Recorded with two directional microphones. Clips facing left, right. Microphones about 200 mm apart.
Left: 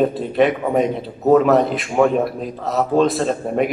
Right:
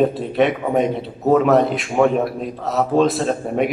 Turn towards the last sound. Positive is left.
turn(degrees=0)  # may be behind; listen again after turning